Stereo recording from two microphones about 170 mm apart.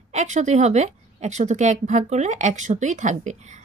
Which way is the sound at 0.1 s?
45° right (ahead or behind).